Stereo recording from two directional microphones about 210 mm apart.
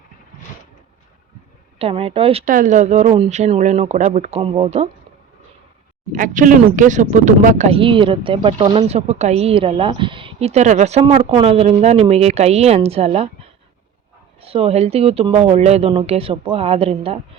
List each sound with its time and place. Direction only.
1.8 s speech: 25° right (ahead or behind)
6.1 s speech: 40° right (ahead or behind)
14.4 s speech: 30° right (ahead or behind)